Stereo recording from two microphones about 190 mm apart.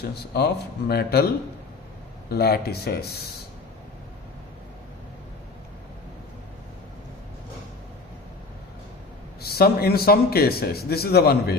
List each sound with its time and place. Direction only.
0.1 s a man's voice: 55° left (ahead or behind)
2.3 s a man's voice: 55° left (ahead or behind)
9.4 s a man's voice: 55° left (ahead or behind)